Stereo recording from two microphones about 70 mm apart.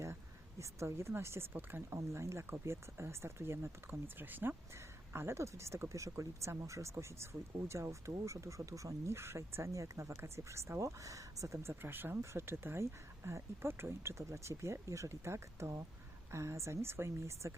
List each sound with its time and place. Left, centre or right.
0.6 s speech: right